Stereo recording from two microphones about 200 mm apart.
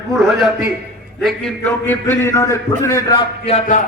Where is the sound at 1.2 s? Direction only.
5° left (ahead or behind).